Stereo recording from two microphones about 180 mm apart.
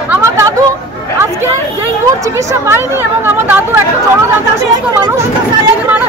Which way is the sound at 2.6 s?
10° right (ahead or behind).